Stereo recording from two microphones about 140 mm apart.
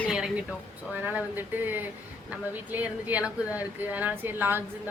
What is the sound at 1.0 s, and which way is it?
A woman's voice, 15° right (ahead or behind).